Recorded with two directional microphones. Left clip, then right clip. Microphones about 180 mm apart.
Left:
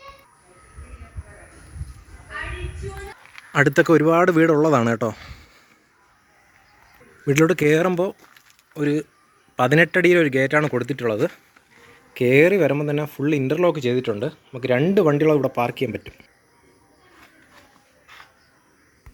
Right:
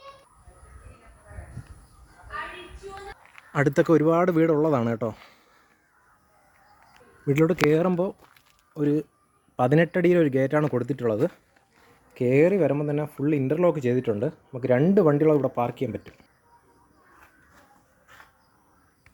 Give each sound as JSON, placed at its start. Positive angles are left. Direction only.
{"t": 3.3, "sound": "speech", "side_deg": 0}
{"t": 7.3, "sound": "speech", "side_deg": -5}
{"t": 8.7, "sound": "speech", "side_deg": -20}
{"t": 12.1, "sound": "speech", "side_deg": 0}